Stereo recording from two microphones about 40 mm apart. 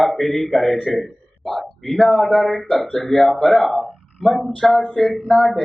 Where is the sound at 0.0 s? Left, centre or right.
Centre.